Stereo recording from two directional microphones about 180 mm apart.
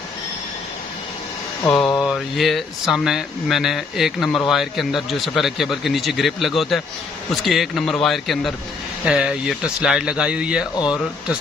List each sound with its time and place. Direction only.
2.0 s speech: centre (ahead or behind)